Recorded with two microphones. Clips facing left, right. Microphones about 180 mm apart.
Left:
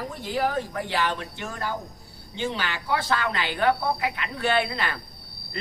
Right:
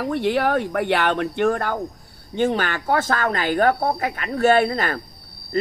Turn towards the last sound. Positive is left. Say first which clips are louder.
# right 7 dB
turn(degrees=-45)  # may be behind; listen again after turning